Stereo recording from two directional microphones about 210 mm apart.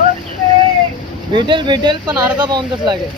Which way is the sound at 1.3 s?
20° right (ahead or behind).